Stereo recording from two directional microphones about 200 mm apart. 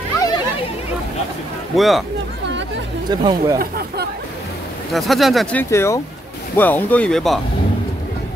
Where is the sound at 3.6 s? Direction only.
50° right (ahead or behind).